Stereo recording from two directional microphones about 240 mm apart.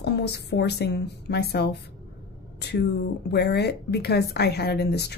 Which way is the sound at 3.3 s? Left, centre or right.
Left.